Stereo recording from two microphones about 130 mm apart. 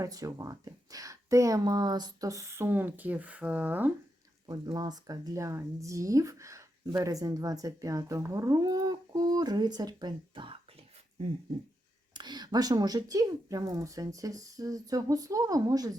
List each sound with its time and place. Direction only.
0.0 s speech: 25° right (ahead or behind)
4.4 s speech: 30° right (ahead or behind)
12.1 s speech: 35° right (ahead or behind)